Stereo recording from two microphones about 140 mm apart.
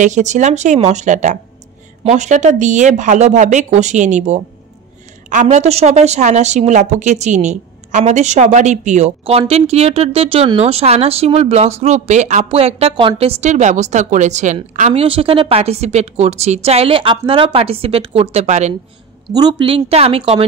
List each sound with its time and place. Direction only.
0.0 s a woman's voice: 60° right (ahead or behind)
12.4 s a woman's voice: 45° right (ahead or behind); by 15.0 s 60° right (ahead or behind)
15.0 s a woman's voice: 40° right (ahead or behind)
19.3 s a woman's voice: 35° right (ahead or behind)